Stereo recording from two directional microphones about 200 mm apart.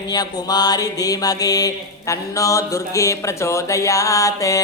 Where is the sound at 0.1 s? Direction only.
20° left (ahead or behind).